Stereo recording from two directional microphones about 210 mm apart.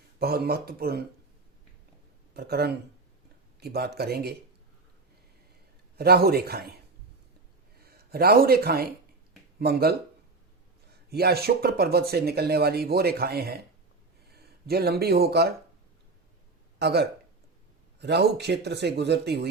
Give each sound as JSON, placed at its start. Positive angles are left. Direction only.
{"t": 0.2, "sound": "speech", "side_deg": -50}
{"t": 2.3, "sound": "speech", "side_deg": -50}
{"t": 6.0, "sound": "speech", "side_deg": -50}
{"t": 7.8, "sound": "speech", "side_deg": -45}
{"t": 11.1, "sound": "speech", "side_deg": -50}
{"t": 16.7, "sound": "speech", "side_deg": -50}